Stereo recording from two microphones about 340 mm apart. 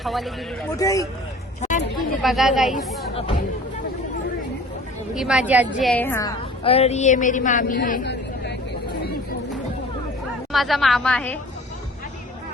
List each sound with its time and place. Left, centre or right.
0.0 s a woman's voice: centre
1.6 s a sound: left
2.2 s a woman's voice: centre
5.1 s a woman's voice: centre; by 8.5 s left
10.5 s a woman's voice: centre